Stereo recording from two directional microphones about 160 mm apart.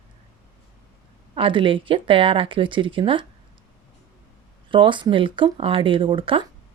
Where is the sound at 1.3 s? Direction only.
30° right (ahead or behind).